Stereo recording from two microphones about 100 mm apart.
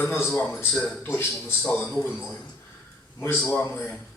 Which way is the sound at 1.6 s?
5° left (ahead or behind).